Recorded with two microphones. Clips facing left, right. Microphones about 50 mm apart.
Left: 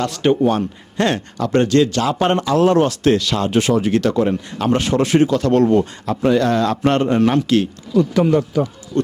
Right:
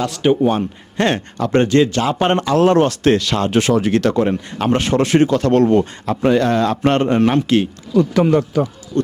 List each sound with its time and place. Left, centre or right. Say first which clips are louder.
0.0 s a man's voice: right 1 dB; centre
0.4 s speech: even; right
2.4 s speech: right 2 dB; right
4.0 s speech: right 1 dB; right
7.9 s speech: right 1 dB; right